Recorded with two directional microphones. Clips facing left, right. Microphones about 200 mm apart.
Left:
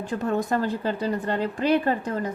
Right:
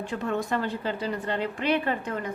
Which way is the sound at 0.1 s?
40° left (ahead or behind).